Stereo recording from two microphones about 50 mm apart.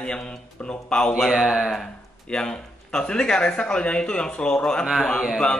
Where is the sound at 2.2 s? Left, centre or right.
Centre.